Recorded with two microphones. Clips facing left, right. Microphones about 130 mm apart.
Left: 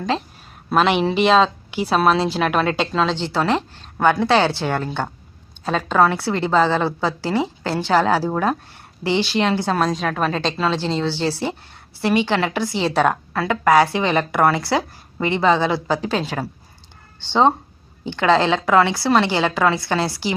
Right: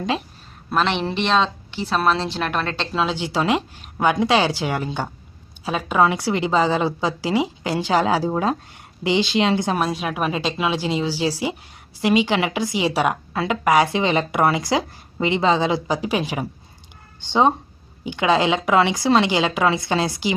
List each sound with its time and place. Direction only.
0.7 s speech: 5° left (ahead or behind)
2.9 s a woman's voice: 5° right (ahead or behind)